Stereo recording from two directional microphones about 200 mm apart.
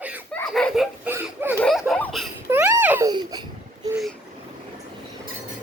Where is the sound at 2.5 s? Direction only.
10° right (ahead or behind).